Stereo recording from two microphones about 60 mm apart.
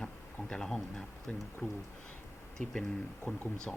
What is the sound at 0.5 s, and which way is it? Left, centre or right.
Speech, centre.